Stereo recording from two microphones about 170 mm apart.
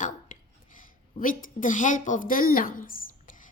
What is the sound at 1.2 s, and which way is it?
A woman's voice, 55° left (ahead or behind).